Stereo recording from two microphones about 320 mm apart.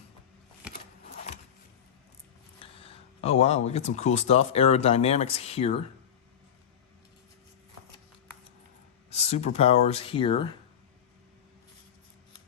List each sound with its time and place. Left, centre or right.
2.6 s a sound: centre
3.7 s speech: left
9.0 s speech: centre